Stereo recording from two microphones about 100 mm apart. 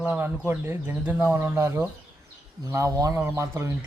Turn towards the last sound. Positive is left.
turn(degrees=-30)  # may be behind; listen again after turning